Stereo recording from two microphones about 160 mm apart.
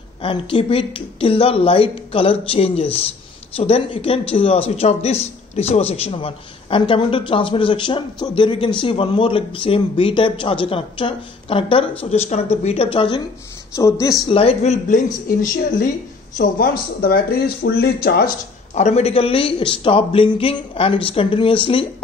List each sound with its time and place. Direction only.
0.2 s speech: 35° left (ahead or behind)
13.7 s speech: 20° left (ahead or behind)
14.3 s speech: 40° left (ahead or behind)
15.2 s speech: 60° left (ahead or behind)
16.3 s speech: 70° left (ahead or behind)
18.8 s speech: 40° left (ahead or behind)